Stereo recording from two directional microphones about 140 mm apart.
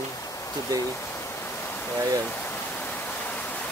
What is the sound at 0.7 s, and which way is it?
Pink noise, 15° left (ahead or behind).